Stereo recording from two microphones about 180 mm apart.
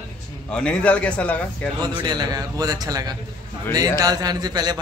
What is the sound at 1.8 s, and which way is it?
A man's voice, 25° right (ahead or behind).